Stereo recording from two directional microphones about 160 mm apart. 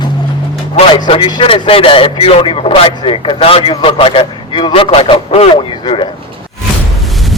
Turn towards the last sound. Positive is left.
turn(degrees=0)  # may be behind; listen again after turning